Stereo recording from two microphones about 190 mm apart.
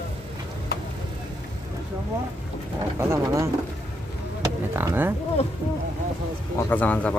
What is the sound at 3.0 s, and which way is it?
Speech, 15° right (ahead or behind).